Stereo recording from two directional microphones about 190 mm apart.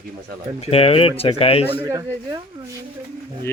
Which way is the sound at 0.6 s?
30° left (ahead or behind).